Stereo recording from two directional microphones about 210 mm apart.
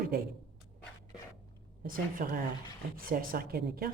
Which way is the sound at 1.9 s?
40° right (ahead or behind).